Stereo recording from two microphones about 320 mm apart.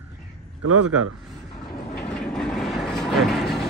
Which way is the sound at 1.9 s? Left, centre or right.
Centre.